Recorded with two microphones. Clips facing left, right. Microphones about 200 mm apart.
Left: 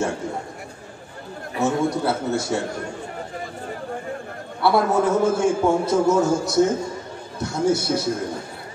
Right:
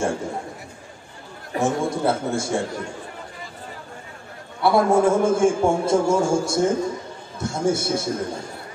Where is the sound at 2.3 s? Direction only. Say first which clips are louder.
Even; 50° right (ahead or behind).